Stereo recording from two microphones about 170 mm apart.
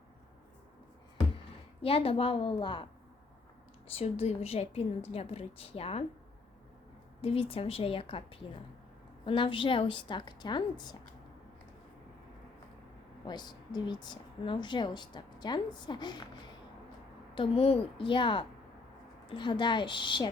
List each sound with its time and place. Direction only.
1.8 s a woman's voice: 35° left (ahead or behind)
3.9 s a woman's voice: 35° left (ahead or behind)
7.2 s a woman's voice: 35° left (ahead or behind)
13.2 s a woman's voice: 25° left (ahead or behind)